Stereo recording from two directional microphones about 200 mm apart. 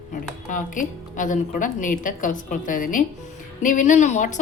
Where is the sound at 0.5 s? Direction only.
40° left (ahead or behind).